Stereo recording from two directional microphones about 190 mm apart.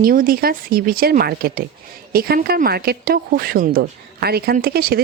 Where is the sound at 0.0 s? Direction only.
50° right (ahead or behind).